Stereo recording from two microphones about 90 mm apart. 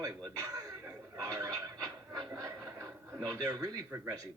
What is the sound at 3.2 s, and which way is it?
Speech, 40° right (ahead or behind).